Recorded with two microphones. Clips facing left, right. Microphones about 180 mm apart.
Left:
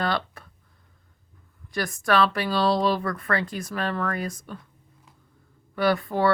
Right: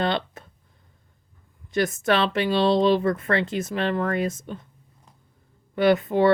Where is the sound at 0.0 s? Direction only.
25° right (ahead or behind).